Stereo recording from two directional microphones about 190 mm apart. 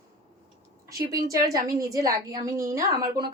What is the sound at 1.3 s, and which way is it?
A woman's voice, 15° right (ahead or behind).